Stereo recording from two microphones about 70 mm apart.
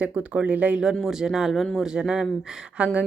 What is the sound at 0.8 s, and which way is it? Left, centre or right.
Speech, centre.